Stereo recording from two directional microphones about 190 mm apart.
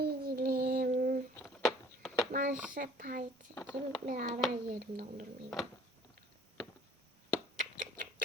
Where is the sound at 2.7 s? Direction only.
45° right (ahead or behind).